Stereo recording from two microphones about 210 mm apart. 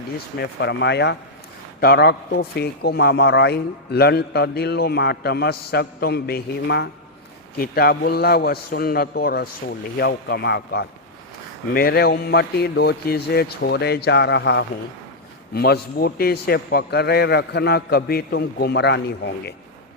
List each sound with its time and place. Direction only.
0.3 s a man's voice: 55° left (ahead or behind)